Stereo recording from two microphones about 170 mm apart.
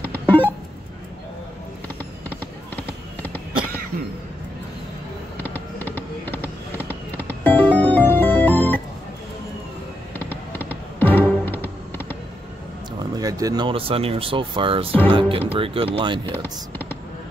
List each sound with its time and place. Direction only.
0.0 s music: 10° left (ahead or behind)
2.2 s fireworks: 10° left (ahead or behind)
5.4 s fireworks: 10° left (ahead or behind)
10.1 s music: 10° left (ahead or behind)
13.1 s speech: 20° right (ahead or behind)
16.3 s speech: 10° left (ahead or behind)